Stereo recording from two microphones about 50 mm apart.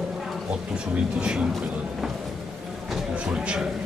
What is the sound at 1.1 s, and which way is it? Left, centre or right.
Speech, centre.